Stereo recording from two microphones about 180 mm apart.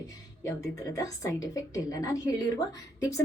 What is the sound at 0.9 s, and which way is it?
Speech, 20° left (ahead or behind).